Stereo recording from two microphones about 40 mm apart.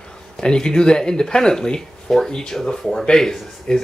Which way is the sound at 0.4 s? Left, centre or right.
Centre.